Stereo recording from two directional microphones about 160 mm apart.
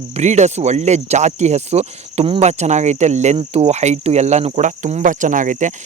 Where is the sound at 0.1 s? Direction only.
45° right (ahead or behind).